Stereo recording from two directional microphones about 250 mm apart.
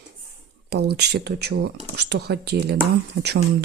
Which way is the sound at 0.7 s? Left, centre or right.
Right.